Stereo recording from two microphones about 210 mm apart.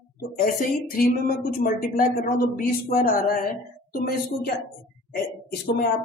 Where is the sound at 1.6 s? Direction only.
40° left (ahead or behind).